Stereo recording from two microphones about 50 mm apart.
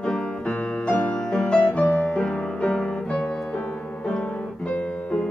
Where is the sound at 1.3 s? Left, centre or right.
Centre.